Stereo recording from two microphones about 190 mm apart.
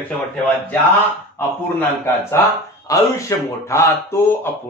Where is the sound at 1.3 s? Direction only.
10° left (ahead or behind).